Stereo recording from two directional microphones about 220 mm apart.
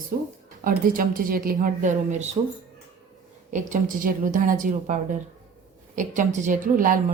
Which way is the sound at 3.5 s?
35° right (ahead or behind).